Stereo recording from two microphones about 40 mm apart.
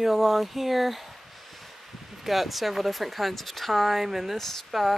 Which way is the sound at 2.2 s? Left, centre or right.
Centre.